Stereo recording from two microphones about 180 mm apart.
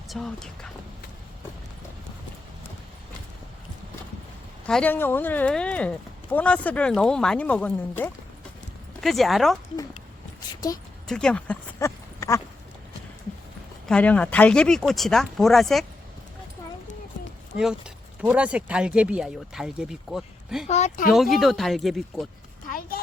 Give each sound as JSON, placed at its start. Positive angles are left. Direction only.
{"t": 0.1, "sound": "speech", "side_deg": 5}
{"t": 4.6, "sound": "speech", "side_deg": 5}
{"t": 11.1, "sound": "speech", "side_deg": 5}
{"t": 13.8, "sound": "speech", "side_deg": 5}
{"t": 17.6, "sound": "speech", "side_deg": -5}
{"t": 20.7, "sound": "speech", "side_deg": 40}
{"t": 21.1, "sound": "speech", "side_deg": 0}